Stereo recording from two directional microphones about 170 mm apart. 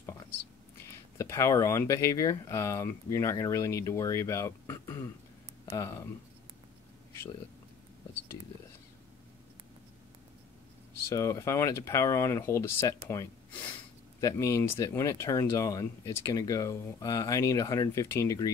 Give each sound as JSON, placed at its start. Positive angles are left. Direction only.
{"t": 1.1, "sound": "speech", "side_deg": 15}
{"t": 11.1, "sound": "speech", "side_deg": 15}